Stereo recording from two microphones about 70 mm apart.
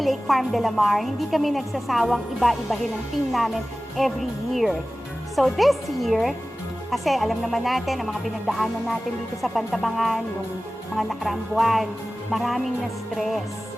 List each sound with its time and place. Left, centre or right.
0.0 s a woman's voice: centre